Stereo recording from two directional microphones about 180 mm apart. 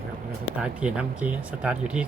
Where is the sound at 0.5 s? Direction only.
5° right (ahead or behind).